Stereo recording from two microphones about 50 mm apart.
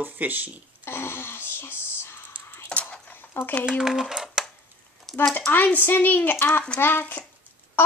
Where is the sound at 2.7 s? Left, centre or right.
Left.